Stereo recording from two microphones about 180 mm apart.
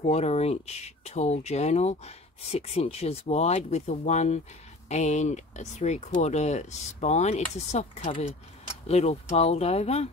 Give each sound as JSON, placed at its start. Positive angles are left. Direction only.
{"t": 0.0, "sound": "speech", "side_deg": 35}